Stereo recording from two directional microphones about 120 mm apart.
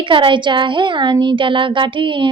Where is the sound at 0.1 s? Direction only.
45° right (ahead or behind).